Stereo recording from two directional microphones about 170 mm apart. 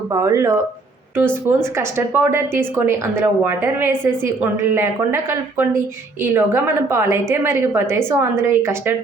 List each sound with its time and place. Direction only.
0.1 s speech: 20° right (ahead or behind)